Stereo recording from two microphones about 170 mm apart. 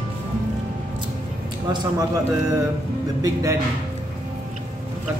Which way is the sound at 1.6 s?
20° right (ahead or behind).